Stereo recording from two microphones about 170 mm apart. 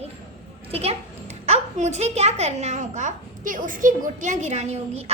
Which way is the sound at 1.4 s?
40° right (ahead or behind).